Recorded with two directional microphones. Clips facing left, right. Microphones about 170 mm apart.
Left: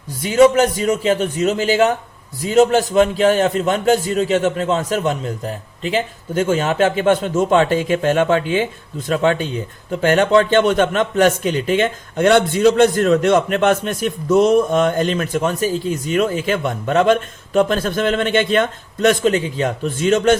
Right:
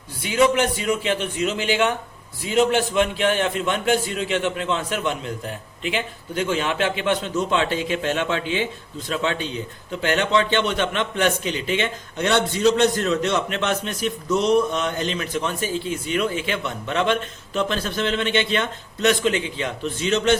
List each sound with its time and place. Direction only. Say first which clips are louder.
0.2 s a man's voice: left 7 dB; 45° left (ahead or behind)